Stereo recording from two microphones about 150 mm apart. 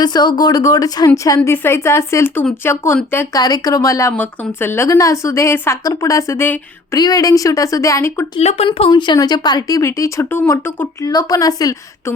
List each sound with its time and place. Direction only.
0.0 s speech: 30° left (ahead or behind)
3.4 s speech: 25° left (ahead or behind)
8.4 s speech: 45° left (ahead or behind)
8.9 s speech: 30° left (ahead or behind)